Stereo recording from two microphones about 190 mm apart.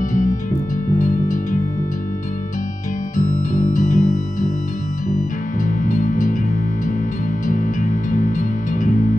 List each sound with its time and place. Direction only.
0.1 s music: 45° left (ahead or behind)
3.2 s music: 45° left (ahead or behind)
5.9 s music: 45° left (ahead or behind)
7.4 s music: 45° left (ahead or behind)